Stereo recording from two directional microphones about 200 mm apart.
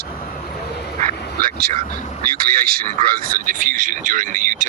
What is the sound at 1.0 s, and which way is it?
Speech, 45° right (ahead or behind).